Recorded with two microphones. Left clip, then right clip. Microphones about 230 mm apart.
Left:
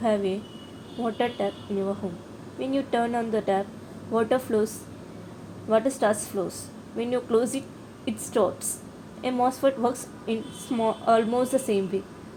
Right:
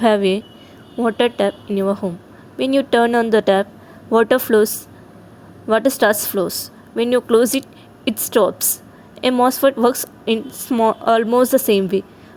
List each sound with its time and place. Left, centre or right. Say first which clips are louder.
0.0 s a woman's voice: right 10 dB; right